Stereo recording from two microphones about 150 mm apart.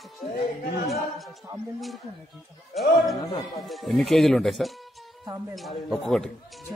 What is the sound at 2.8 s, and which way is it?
Speech, centre (ahead or behind).